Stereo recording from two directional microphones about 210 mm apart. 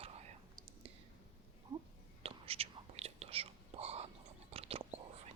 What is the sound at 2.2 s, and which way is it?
Whispering, 25° right (ahead or behind).